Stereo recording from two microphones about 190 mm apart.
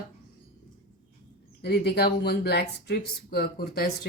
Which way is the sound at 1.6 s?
60° left (ahead or behind).